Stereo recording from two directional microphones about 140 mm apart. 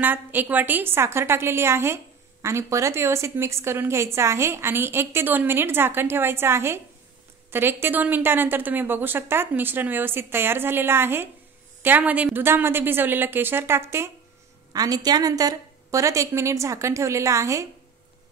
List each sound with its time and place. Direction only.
0.0 s a woman's voice: 15° right (ahead or behind)